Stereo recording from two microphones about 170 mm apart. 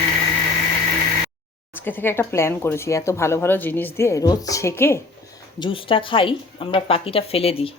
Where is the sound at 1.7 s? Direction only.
10° left (ahead or behind).